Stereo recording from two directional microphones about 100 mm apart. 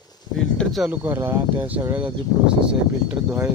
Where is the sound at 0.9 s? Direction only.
20° right (ahead or behind).